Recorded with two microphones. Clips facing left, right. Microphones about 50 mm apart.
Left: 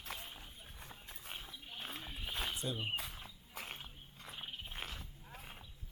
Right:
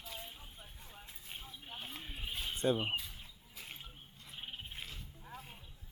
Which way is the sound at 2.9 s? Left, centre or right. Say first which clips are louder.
Right 1 dB; left.